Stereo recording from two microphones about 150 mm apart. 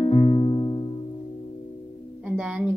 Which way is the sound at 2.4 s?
5° right (ahead or behind).